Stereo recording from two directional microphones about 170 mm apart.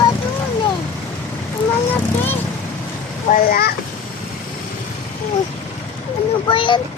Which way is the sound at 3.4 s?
65° left (ahead or behind).